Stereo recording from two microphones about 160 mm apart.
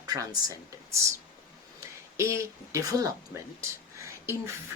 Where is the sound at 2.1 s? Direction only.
20° right (ahead or behind).